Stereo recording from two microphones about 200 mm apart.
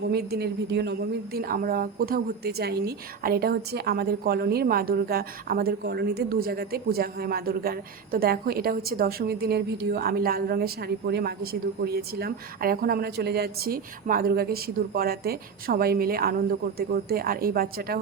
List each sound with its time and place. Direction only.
0.0 s a woman's voice: 55° right (ahead or behind)